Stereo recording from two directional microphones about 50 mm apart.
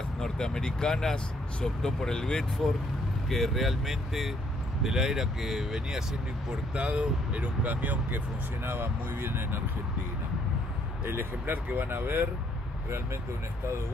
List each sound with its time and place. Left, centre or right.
0.2 s speech: centre
6.5 s speech: right
8.6 s speech: right
11.1 s speech: right